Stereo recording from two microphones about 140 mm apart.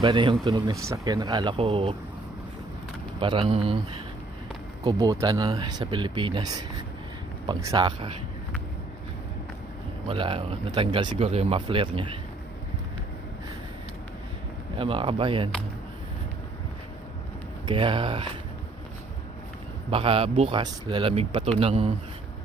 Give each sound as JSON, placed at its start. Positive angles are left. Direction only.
{"t": 0.0, "sound": "speech", "side_deg": -35}
{"t": 0.8, "sound": "speech", "side_deg": -20}
{"t": 1.5, "sound": "speech", "side_deg": -40}
{"t": 3.2, "sound": "speech", "side_deg": -40}
{"t": 4.8, "sound": "speech", "side_deg": -30}
{"t": 10.1, "sound": "speech", "side_deg": -40}
{"t": 14.8, "sound": "speech", "side_deg": -40}
{"t": 17.7, "sound": "speech", "side_deg": -35}
{"t": 19.9, "sound": "a man's voice", "side_deg": -40}